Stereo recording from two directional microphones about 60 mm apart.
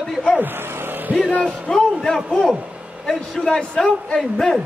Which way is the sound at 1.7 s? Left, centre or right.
Centre.